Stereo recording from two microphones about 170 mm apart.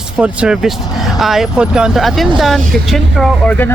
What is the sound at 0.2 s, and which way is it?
A man's voice, 5° right (ahead or behind).